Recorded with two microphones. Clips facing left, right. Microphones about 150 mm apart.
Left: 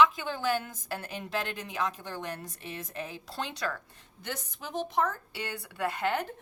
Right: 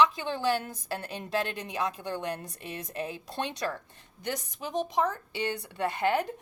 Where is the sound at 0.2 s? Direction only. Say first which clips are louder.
Right 2 dB; 20° right (ahead or behind).